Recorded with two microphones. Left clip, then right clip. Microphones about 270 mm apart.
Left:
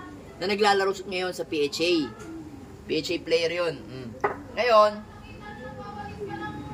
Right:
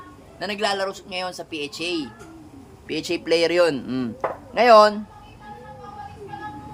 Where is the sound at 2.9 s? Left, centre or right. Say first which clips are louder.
Right 3 dB; centre.